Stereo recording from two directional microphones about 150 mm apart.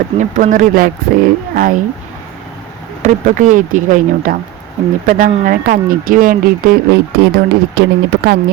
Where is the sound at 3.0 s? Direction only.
55° right (ahead or behind).